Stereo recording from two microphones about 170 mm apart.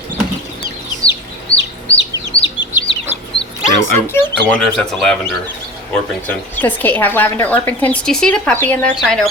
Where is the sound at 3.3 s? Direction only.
35° left (ahead or behind).